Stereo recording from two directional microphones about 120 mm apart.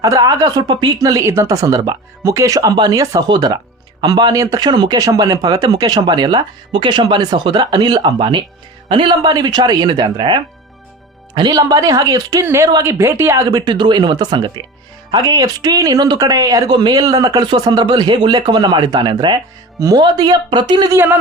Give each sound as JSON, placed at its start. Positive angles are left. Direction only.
{"t": 0.0, "sound": "speech", "side_deg": -30}
{"t": 20.9, "sound": "speech", "side_deg": -20}